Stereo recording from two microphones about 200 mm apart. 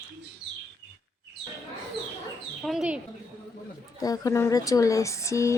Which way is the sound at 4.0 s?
20° left (ahead or behind).